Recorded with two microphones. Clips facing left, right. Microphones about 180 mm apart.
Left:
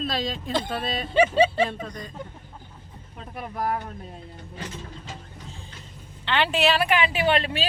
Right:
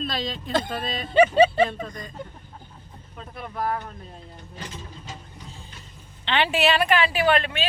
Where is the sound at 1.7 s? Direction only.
45° right (ahead or behind).